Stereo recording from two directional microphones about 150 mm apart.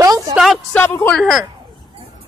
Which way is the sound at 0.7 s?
10° left (ahead or behind).